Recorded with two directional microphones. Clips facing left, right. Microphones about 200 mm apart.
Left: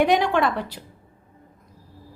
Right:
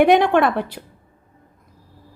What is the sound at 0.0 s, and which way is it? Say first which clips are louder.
Speech: right 5 dB; 60° right (ahead or behind).